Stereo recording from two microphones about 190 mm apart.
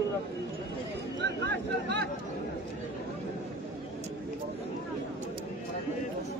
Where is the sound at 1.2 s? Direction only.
65° right (ahead or behind).